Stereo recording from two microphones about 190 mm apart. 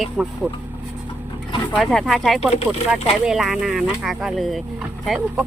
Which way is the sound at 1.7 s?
Centre (ahead or behind).